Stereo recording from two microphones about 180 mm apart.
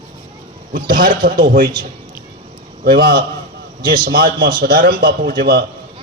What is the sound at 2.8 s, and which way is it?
A man's voice, 55° right (ahead or behind).